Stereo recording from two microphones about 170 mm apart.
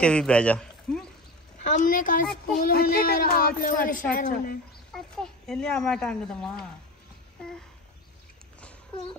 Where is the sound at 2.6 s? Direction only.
65° left (ahead or behind).